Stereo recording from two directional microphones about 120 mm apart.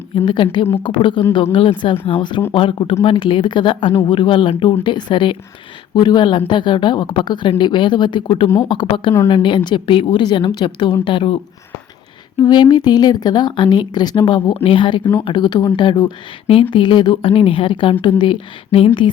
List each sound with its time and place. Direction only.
0.3 s a woman's voice: 40° left (ahead or behind)
12.4 s a woman's voice: 35° left (ahead or behind)